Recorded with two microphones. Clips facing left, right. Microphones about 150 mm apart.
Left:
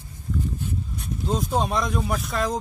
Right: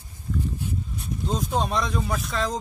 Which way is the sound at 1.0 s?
Centre (ahead or behind).